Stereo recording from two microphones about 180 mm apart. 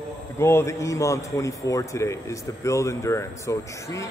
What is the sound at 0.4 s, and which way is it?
A man's voice, 15° left (ahead or behind).